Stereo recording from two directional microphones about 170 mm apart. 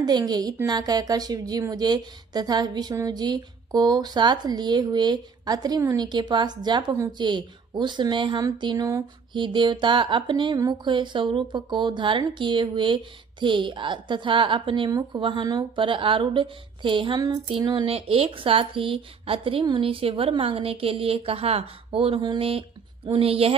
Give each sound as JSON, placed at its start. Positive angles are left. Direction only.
{"t": 0.0, "sound": "a woman's voice", "side_deg": -25}